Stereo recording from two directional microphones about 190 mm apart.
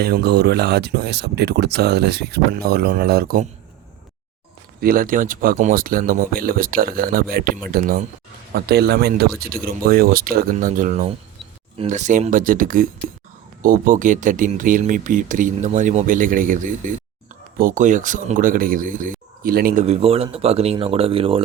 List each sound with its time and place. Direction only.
0.0 s speech: 55° right (ahead or behind)
4.8 s speech: 50° right (ahead or behind)
19.8 s speech: 30° right (ahead or behind)